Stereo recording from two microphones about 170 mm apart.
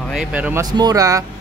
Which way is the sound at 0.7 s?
20° right (ahead or behind).